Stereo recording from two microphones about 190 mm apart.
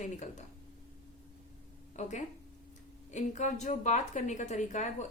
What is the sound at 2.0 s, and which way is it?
A woman's voice, 40° left (ahead or behind).